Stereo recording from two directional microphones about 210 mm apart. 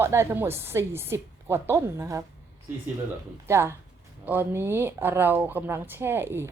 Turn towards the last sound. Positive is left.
turn(degrees=-10)  # may be behind; listen again after turning